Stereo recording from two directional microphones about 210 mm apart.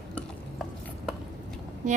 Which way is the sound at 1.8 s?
35° right (ahead or behind).